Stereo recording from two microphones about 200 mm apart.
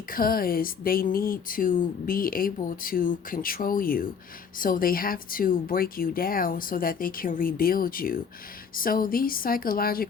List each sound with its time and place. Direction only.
0.1 s speech: 45° left (ahead or behind)